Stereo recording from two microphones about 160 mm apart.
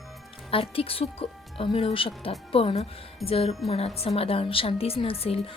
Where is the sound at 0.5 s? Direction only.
35° left (ahead or behind).